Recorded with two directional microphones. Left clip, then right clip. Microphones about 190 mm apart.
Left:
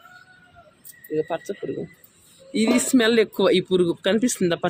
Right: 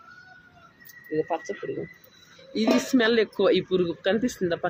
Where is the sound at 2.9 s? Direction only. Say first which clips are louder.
Left 3 dB; 50° left (ahead or behind).